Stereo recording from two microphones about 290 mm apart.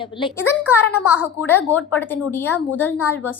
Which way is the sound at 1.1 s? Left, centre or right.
Centre.